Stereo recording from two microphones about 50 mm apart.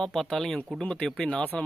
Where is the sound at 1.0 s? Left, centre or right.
Centre.